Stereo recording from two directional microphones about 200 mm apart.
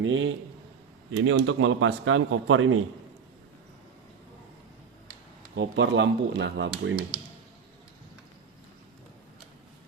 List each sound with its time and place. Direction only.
0.0 s a man's voice: 75° right (ahead or behind); by 2.8 s 90° right
5.5 s speech: 65° right (ahead or behind)